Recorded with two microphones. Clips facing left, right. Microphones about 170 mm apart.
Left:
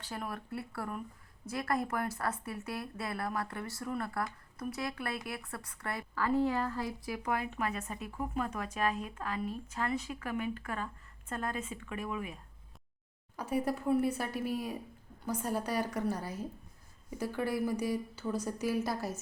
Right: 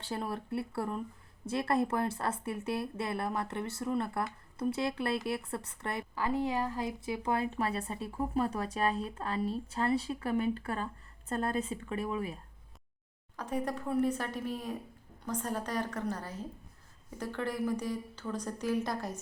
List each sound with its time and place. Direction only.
0.0 s a woman's voice: 30° right (ahead or behind)
13.3 s a woman's voice: 10° left (ahead or behind)